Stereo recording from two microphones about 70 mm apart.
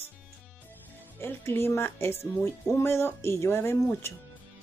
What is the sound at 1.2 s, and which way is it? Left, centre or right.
A woman's voice, left.